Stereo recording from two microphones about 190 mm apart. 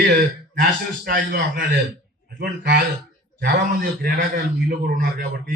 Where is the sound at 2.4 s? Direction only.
65° right (ahead or behind).